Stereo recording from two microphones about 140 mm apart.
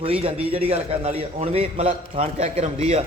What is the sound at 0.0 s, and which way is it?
A man's voice, 40° right (ahead or behind).